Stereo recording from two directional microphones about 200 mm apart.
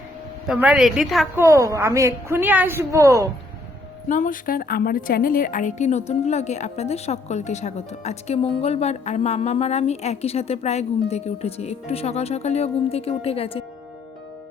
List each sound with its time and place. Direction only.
0.4 s a woman's voice: centre (ahead or behind)
1.4 s a woman's voice: 15° right (ahead or behind)
4.1 s a woman's voice: 40° left (ahead or behind)